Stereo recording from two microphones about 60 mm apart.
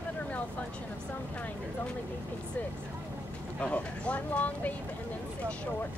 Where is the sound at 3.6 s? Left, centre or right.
Left.